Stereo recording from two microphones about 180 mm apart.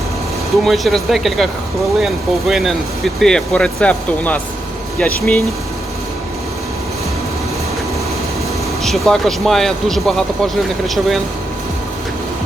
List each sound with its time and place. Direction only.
0.6 s speech: centre (ahead or behind)
8.8 s speech: centre (ahead or behind)